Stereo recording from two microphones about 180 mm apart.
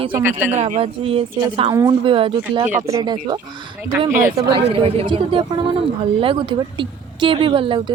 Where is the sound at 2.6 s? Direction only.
15° right (ahead or behind).